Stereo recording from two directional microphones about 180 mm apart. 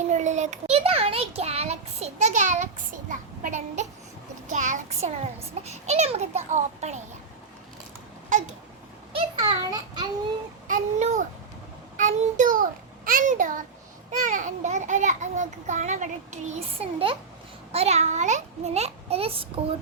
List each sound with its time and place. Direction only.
0.0 s a child's voice: 40° right (ahead or behind)
8.3 s a sound: 45° right (ahead or behind)
9.1 s child singing: 30° right (ahead or behind)
10.7 s a sound: 45° right (ahead or behind)
11.9 s child singing: 45° right (ahead or behind)
13.1 s a child's voice: 45° right (ahead or behind); by 19.5 s 30° right (ahead or behind)